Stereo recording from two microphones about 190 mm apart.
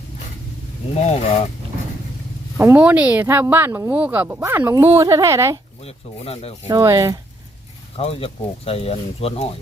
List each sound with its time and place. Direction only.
0.9 s speech: 35° left (ahead or behind)
2.6 s speech: 10° right (ahead or behind)
5.8 s speech: 30° left (ahead or behind)
6.7 s speech: 20° right (ahead or behind)
7.9 s speech: 30° left (ahead or behind)